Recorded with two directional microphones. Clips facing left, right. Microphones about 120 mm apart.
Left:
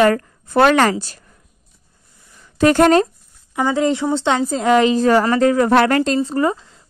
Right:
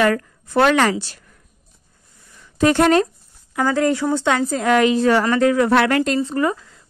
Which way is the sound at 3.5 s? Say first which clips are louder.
Left 1 dB; 20° left (ahead or behind).